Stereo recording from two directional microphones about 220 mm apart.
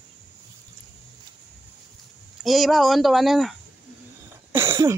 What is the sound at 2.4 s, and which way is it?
Speech, centre (ahead or behind).